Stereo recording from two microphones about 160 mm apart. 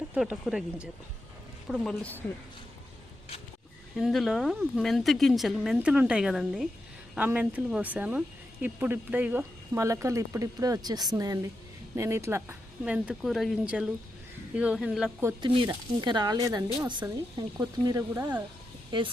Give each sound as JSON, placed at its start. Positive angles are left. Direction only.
{"t": 0.1, "sound": "a woman's voice", "side_deg": -5}
{"t": 3.9, "sound": "a woman's voice", "side_deg": 0}
{"t": 15.4, "sound": "speech", "side_deg": -30}
{"t": 18.1, "sound": "speech", "side_deg": -15}
{"t": 18.9, "sound": "speech", "side_deg": -30}